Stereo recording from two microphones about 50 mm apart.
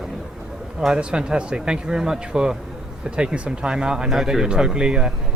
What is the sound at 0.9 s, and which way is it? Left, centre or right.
Speech, centre.